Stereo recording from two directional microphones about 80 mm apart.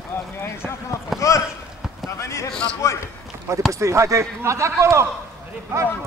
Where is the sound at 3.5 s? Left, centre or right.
Right.